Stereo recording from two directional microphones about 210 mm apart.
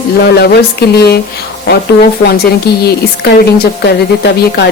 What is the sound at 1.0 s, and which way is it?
Speech, 50° left (ahead or behind).